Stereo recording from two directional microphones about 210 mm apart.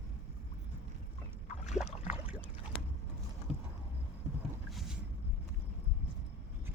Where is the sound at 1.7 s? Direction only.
5° right (ahead or behind).